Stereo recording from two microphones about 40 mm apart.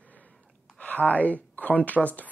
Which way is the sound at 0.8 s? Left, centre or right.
Left.